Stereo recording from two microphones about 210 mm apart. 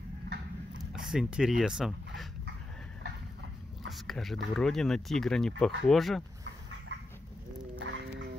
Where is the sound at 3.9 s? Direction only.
Centre (ahead or behind).